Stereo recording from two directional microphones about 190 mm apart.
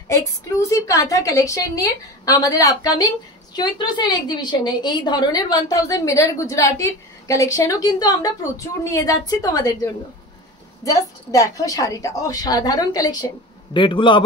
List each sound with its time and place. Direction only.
0.1 s a woman's voice: 15° left (ahead or behind)